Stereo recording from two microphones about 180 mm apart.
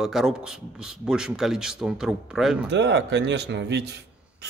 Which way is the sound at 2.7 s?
75° right (ahead or behind).